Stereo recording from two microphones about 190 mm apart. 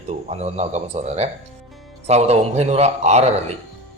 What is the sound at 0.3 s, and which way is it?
A man's voice, 35° right (ahead or behind).